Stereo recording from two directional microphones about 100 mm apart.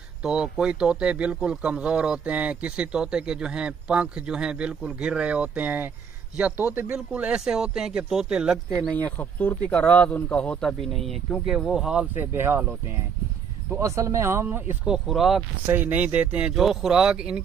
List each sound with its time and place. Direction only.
0.2 s a man's voice: 10° right (ahead or behind)
8.8 s speech: 15° left (ahead or behind); by 12.1 s 5° right (ahead or behind)
12.2 s speech: 20° right (ahead or behind)
13.7 s speech: 30° right (ahead or behind)
14.9 s speech: centre (ahead or behind)
15.6 s a man's voice: 20° right (ahead or behind)